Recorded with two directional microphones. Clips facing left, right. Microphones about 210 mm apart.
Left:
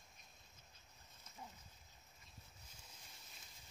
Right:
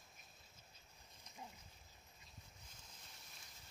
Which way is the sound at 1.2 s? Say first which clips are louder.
Even; 15° right (ahead or behind).